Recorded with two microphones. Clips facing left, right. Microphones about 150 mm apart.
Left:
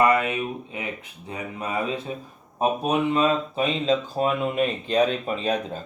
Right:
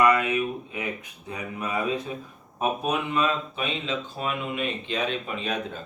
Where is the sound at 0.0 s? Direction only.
30° left (ahead or behind).